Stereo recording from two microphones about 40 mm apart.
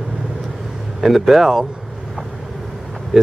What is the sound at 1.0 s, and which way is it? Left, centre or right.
Speech, centre.